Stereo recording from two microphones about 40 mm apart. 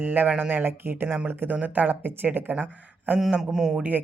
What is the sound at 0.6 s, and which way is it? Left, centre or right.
Speech, right.